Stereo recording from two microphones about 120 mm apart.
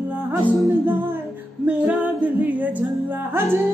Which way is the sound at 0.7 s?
20° right (ahead or behind).